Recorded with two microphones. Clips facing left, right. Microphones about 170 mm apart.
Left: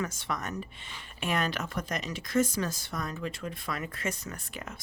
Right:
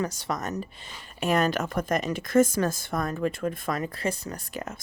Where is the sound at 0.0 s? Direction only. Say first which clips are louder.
Right 4 dB; 35° right (ahead or behind).